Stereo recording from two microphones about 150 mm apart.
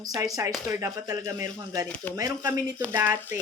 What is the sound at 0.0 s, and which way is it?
A woman's voice, 25° right (ahead or behind).